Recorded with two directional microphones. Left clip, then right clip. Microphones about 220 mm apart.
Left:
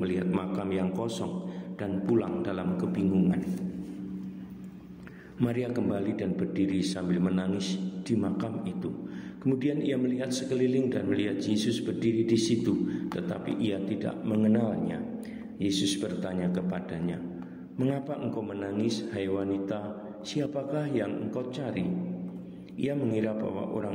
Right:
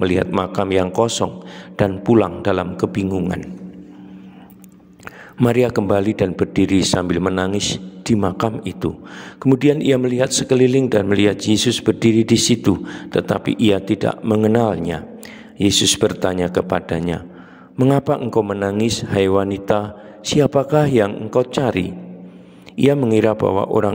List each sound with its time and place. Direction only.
0.0 s a man's voice: 45° right (ahead or behind)
5.4 s a man's voice: 50° right (ahead or behind)